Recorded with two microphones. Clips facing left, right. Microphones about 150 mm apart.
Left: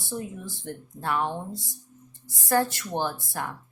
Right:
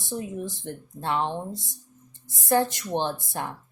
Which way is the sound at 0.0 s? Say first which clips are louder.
Right 3 dB; 20° right (ahead or behind).